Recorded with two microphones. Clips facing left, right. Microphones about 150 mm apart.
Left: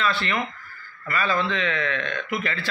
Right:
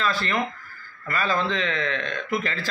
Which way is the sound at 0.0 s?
40° right (ahead or behind).